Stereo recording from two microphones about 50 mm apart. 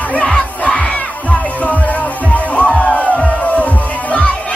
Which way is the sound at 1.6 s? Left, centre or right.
Left.